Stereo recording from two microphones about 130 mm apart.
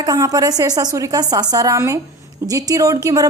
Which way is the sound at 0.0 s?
30° right (ahead or behind).